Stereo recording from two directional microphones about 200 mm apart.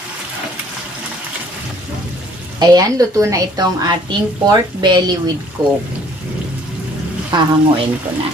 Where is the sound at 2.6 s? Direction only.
15° right (ahead or behind).